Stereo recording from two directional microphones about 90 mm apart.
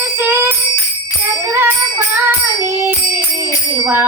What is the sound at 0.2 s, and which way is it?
Bicycle bell, 25° right (ahead or behind).